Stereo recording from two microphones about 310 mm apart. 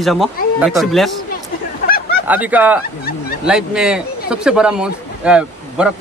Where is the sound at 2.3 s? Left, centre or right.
Centre.